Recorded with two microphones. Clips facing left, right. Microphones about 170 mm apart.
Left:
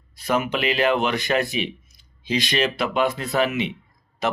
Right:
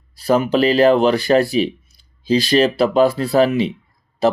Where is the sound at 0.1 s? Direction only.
35° right (ahead or behind).